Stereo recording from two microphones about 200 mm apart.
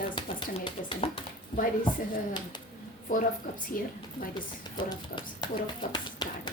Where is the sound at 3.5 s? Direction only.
40° left (ahead or behind).